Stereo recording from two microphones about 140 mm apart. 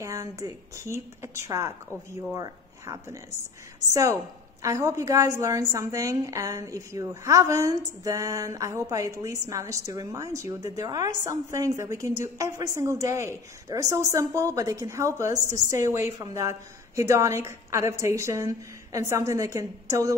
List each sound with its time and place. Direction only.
0.0 s a woman's voice: 25° right (ahead or behind)